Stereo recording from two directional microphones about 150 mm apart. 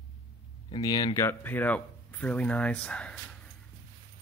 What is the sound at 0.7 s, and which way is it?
Speech, 25° left (ahead or behind).